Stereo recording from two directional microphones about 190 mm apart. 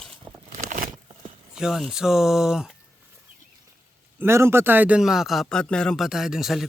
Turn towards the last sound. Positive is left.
turn(degrees=0)  # may be behind; listen again after turning